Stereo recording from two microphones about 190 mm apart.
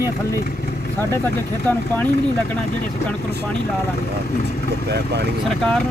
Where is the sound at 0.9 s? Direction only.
10° left (ahead or behind).